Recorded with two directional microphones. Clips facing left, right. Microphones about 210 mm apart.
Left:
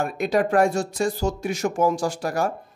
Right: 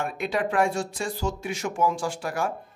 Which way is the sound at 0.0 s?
40° left (ahead or behind).